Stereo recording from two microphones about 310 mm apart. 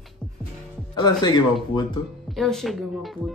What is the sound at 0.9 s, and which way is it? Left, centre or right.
Speech, centre.